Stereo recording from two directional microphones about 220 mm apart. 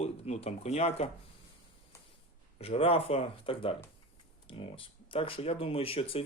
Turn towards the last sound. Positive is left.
turn(degrees=25)  # may be behind; listen again after turning